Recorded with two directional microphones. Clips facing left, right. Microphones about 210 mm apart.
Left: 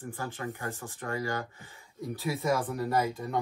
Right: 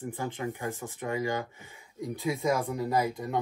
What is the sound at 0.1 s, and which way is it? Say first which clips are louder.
Speech: right 1 dB; 15° right (ahead or behind).